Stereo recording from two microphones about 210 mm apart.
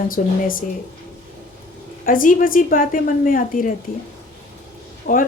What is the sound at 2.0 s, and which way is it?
Speech, 40° left (ahead or behind).